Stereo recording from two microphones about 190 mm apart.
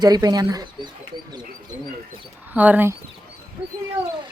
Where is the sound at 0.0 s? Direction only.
20° right (ahead or behind).